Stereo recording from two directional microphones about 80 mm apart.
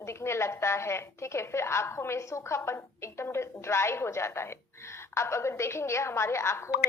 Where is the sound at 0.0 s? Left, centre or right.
Left.